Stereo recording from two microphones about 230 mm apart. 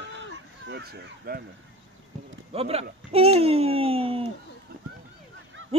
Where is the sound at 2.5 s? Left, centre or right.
Right.